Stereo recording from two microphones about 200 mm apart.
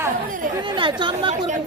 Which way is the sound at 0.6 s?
25° right (ahead or behind).